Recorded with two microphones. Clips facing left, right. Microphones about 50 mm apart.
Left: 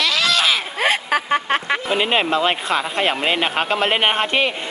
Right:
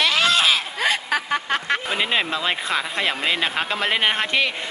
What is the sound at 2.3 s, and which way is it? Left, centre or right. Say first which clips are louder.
Speech: left 5 dB; left.